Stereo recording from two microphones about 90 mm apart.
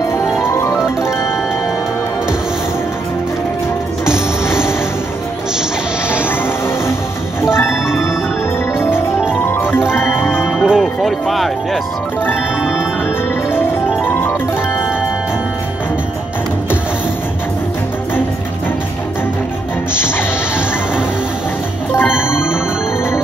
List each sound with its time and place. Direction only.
0.4 s music: 30° left (ahead or behind)
7.5 s music: 30° left (ahead or behind)
9.3 s music: 25° left (ahead or behind)
10.6 s music: centre (ahead or behind)
14.0 s music: 25° left (ahead or behind)
21.9 s music: 25° left (ahead or behind)